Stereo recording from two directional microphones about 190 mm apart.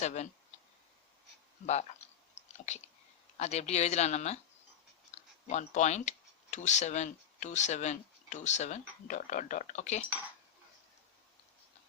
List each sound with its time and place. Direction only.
0.0 s speech: 40° left (ahead or behind)
1.6 s speech: 35° left (ahead or behind)
3.3 s speech: 35° left (ahead or behind)